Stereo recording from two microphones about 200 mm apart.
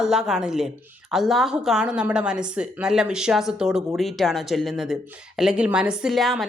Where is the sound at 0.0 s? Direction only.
5° right (ahead or behind).